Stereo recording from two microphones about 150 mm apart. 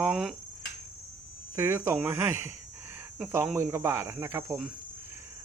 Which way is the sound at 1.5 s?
15° right (ahead or behind).